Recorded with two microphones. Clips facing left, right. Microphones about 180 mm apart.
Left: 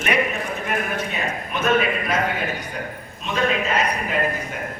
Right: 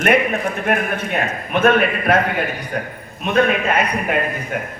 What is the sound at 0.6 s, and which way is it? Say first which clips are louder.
A man's voice: right 6 dB; 60° right (ahead or behind).